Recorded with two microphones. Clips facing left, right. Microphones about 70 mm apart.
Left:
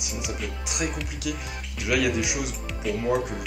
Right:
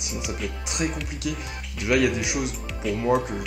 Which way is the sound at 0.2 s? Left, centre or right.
Centre.